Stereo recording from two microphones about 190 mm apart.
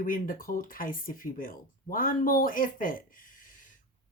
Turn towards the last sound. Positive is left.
turn(degrees=45)  # may be behind; listen again after turning